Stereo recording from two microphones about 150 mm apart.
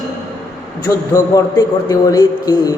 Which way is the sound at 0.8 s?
20° left (ahead or behind).